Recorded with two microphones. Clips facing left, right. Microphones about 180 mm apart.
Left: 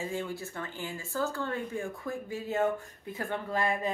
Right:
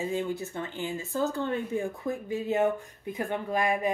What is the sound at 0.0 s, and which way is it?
Speech, 20° right (ahead or behind).